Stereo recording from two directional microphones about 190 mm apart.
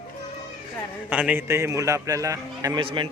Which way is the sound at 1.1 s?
5° right (ahead or behind).